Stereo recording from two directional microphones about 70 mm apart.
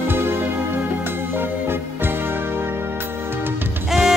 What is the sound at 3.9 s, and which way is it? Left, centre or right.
Music, centre.